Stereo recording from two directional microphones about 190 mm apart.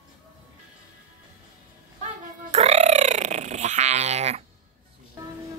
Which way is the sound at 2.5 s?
35° right (ahead or behind).